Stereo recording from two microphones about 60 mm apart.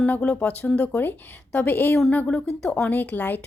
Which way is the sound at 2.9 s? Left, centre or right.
Left.